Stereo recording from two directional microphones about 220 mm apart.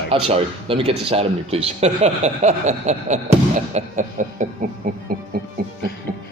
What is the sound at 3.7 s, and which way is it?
Music, 35° right (ahead or behind).